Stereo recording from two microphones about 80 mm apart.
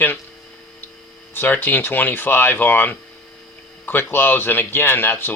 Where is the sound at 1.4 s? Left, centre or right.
Left.